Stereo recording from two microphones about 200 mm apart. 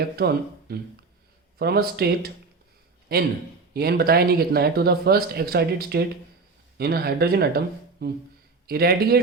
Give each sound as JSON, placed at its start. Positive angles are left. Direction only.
{"t": 0.2, "sound": "speech", "side_deg": -50}